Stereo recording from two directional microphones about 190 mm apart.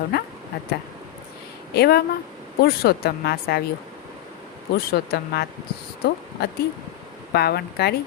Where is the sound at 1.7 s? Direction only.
55° left (ahead or behind).